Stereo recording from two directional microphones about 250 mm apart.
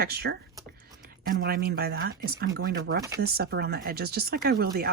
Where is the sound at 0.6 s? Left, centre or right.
Centre.